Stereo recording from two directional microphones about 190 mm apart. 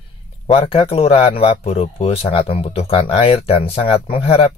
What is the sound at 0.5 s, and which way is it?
Speech, 30° left (ahead or behind).